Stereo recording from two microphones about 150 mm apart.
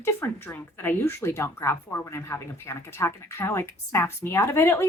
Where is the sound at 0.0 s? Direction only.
15° left (ahead or behind).